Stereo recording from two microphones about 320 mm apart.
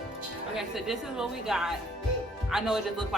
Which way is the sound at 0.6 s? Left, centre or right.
Centre.